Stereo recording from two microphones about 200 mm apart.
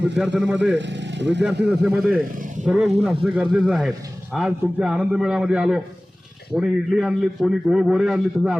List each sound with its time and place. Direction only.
0.3 s a man's voice: 10° right (ahead or behind)
0.8 s speech: 65° right (ahead or behind)
1.6 s a man's voice: 5° right (ahead or behind)